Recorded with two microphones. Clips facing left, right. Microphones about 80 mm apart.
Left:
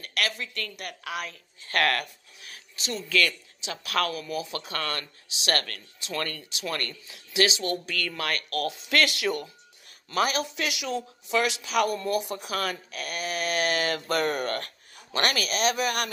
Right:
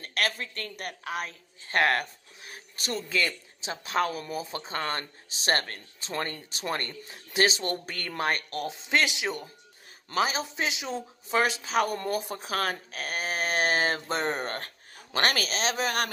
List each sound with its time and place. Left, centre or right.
0.0 s a woman's voice: right
2.8 s speech: right
3.1 s a woman's voice: right
4.5 s speech: right
7.0 s a woman's voice: right